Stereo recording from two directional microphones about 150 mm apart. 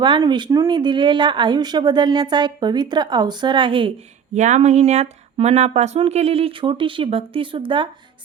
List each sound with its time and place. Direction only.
0.0 s speech: 30° right (ahead or behind)
4.4 s speech: 55° right (ahead or behind); by 7.9 s 35° right (ahead or behind)